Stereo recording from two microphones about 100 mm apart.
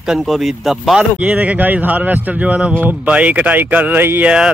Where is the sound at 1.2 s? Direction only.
15° right (ahead or behind).